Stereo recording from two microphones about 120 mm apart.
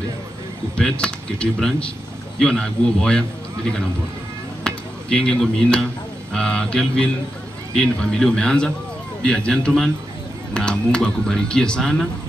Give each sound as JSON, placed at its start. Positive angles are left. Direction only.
{"t": 0.7, "sound": "speech", "side_deg": 10}
{"t": 4.6, "sound": "speech", "side_deg": 5}